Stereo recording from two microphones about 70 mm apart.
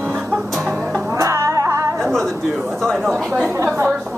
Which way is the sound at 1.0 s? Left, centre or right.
Right.